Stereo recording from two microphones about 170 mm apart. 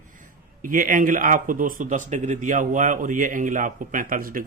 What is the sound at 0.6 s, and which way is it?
Speech, 50° right (ahead or behind).